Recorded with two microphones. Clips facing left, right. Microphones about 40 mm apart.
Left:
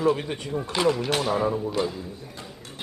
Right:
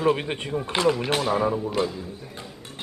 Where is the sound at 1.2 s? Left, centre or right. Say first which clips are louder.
Right 1 dB; centre.